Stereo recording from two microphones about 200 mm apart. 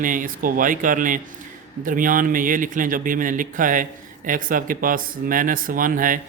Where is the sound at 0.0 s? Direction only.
40° right (ahead or behind).